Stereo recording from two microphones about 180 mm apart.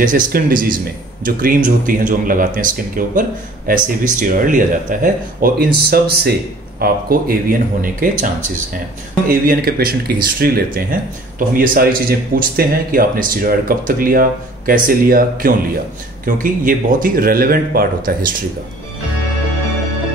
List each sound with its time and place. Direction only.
0.0 s speech: 50° right (ahead or behind)
9.3 s speech: 55° right (ahead or behind)